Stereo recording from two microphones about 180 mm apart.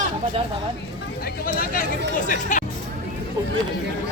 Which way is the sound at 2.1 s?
45° left (ahead or behind).